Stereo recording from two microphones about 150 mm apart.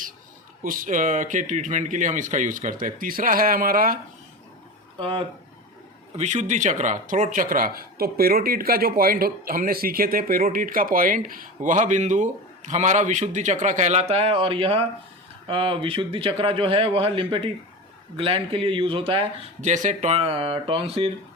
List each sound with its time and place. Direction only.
0.6 s speech: 65° right (ahead or behind)
4.9 s speech: 35° right (ahead or behind)
6.1 s speech: 50° right (ahead or behind)
19.7 s speech: 55° right (ahead or behind); by 21.1 s 40° right (ahead or behind)